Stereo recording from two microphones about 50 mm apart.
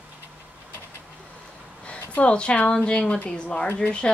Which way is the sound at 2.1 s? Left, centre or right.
Left.